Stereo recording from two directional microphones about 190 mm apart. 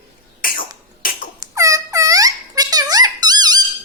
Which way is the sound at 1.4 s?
15° right (ahead or behind).